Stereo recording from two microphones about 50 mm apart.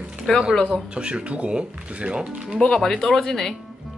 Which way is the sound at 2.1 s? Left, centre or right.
Centre.